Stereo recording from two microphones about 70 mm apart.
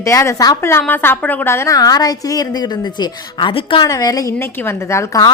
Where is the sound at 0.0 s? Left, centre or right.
Left.